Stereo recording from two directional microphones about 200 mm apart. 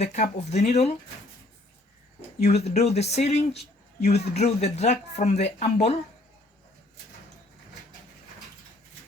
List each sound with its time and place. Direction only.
0.0 s speech: 35° left (ahead or behind)
2.4 s speech: 30° left (ahead or behind)